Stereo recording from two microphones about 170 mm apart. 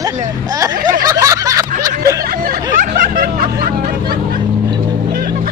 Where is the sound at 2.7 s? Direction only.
55° right (ahead or behind).